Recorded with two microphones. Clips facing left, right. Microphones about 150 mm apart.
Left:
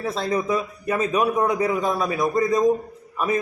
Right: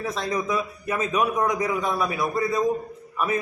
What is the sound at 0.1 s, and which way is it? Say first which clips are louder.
Speech: left 4 dB; 35° left (ahead or behind).